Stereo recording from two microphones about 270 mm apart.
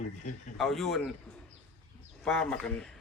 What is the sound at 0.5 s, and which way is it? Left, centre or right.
Speech, centre.